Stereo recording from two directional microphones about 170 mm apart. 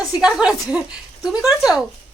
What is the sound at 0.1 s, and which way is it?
Speech, 5° right (ahead or behind).